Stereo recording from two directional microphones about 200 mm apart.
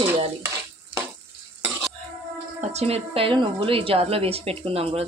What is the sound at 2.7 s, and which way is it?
A woman's voice, 30° right (ahead or behind).